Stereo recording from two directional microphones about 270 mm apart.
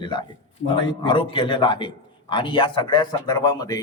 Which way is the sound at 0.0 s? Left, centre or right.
Centre.